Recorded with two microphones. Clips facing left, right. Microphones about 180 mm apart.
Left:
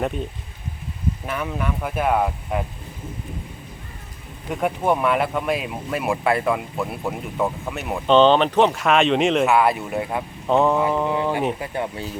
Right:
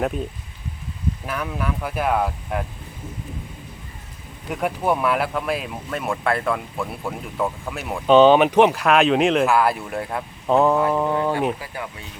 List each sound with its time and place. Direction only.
1.3 s speech: centre (ahead or behind)
4.4 s speech: 5° right (ahead or behind)
8.7 s speech: centre (ahead or behind)
11.6 s speech: 25° left (ahead or behind)